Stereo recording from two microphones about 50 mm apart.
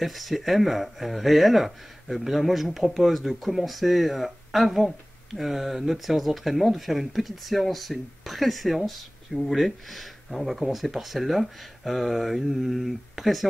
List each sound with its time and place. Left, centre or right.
0.0 s a man's voice: centre